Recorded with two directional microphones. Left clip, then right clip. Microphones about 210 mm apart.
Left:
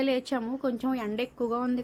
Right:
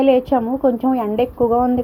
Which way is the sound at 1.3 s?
15° left (ahead or behind).